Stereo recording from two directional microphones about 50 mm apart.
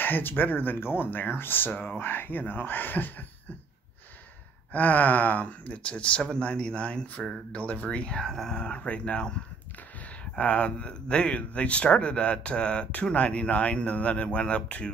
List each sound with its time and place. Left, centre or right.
0.0 s speech: left
4.7 s speech: left
8.2 s speech: centre
8.5 s speech: left
10.3 s speech: left